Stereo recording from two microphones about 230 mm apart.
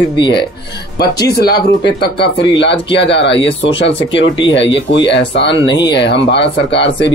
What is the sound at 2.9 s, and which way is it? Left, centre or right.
Speech, left.